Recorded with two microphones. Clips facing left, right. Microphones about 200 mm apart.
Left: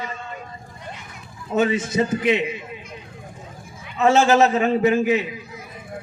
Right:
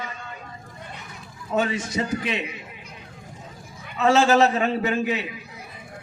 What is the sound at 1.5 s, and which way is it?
Speech, 20° left (ahead or behind).